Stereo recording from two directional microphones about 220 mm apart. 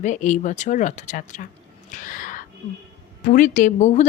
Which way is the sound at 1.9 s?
35° left (ahead or behind).